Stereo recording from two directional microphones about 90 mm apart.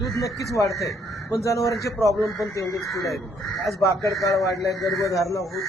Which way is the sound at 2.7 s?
Centre (ahead or behind).